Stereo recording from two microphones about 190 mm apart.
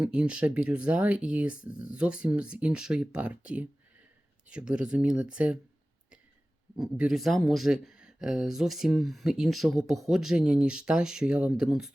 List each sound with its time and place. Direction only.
0.0 s speech: 5° right (ahead or behind)
6.7 s speech: 5° right (ahead or behind)